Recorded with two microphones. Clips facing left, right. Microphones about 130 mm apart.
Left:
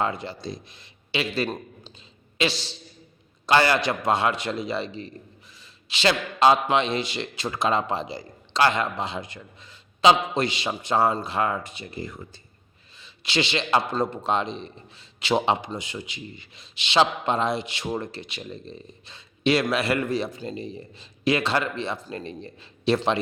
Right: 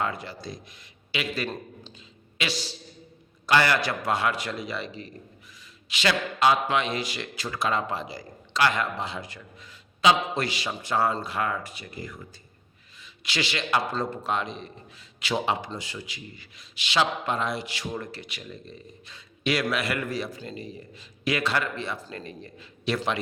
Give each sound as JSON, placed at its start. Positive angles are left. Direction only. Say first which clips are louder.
{"t": 0.0, "sound": "a man's voice", "louder": "left 3 dB", "side_deg": 25}